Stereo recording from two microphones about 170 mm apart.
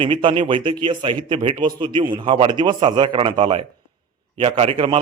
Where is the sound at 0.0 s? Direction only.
30° right (ahead or behind).